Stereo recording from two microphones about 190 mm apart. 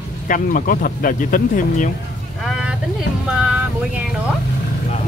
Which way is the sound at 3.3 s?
5° right (ahead or behind).